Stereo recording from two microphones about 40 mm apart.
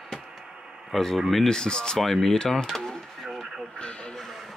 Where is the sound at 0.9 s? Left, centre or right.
Centre.